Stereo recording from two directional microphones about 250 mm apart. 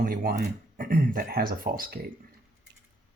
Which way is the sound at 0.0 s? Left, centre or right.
Right.